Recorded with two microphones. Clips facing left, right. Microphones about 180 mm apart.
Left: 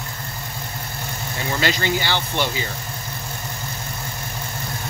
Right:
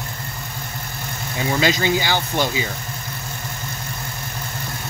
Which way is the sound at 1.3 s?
15° right (ahead or behind).